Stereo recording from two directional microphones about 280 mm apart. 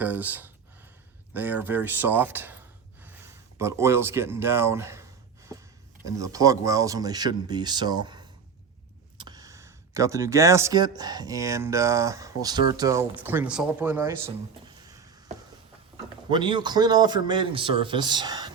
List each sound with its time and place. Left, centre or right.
0.0 s speech: centre
6.1 s speech: centre
16.3 s speech: centre